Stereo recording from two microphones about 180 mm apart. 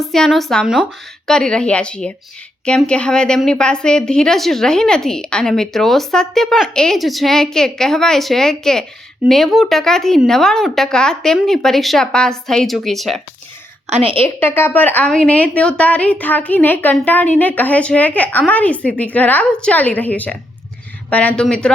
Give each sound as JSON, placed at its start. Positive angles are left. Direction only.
{"t": 0.0, "sound": "a woman's voice", "side_deg": 0}
{"t": 13.9, "sound": "a woman's voice", "side_deg": -30}
{"t": 14.3, "sound": "a woman's voice", "side_deg": 10}